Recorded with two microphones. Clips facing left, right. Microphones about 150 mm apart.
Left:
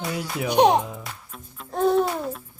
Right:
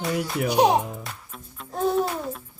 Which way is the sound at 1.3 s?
Centre (ahead or behind).